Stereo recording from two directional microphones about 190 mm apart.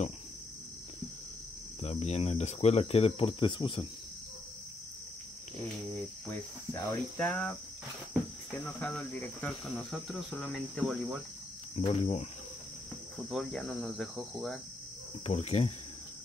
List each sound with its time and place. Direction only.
1.8 s speech: 35° left (ahead or behind)
6.2 s cricket: 15° left (ahead or behind)
8.5 s speech: 10° left (ahead or behind)
11.8 s speech: 35° left (ahead or behind)
13.3 s speech: centre (ahead or behind)
15.2 s speech: 35° left (ahead or behind)